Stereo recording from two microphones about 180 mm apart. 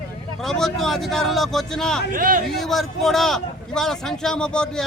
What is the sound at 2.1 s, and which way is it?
Speech, 50° right (ahead or behind).